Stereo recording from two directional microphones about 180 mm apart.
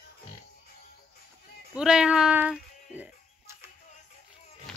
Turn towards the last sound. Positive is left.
turn(degrees=-10)  # may be behind; listen again after turning